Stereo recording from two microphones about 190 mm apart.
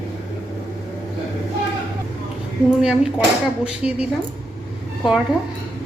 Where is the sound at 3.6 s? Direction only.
5° right (ahead or behind).